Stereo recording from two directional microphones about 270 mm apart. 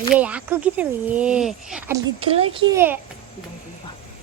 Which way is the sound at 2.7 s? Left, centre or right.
Centre.